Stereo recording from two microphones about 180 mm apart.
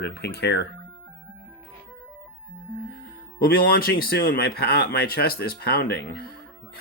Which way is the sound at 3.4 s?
55° left (ahead or behind).